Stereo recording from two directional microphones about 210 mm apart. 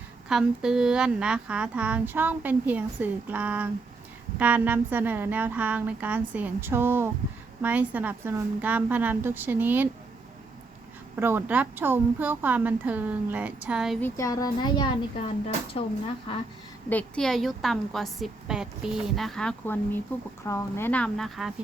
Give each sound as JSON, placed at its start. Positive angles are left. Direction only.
{"t": 0.3, "sound": "a woman's voice", "side_deg": -5}
{"t": 11.2, "sound": "a woman's voice", "side_deg": -10}
{"t": 14.0, "sound": "a woman's voice", "side_deg": 15}
{"t": 16.9, "sound": "a woman's voice", "side_deg": 5}